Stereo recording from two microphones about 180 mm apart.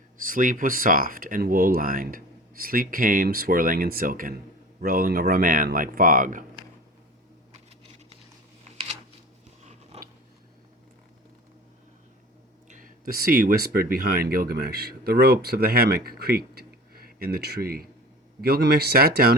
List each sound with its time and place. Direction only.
0.2 s speech: 50° right (ahead or behind)
9.9 s a sound: 35° right (ahead or behind)
12.6 s speech: 45° right (ahead or behind)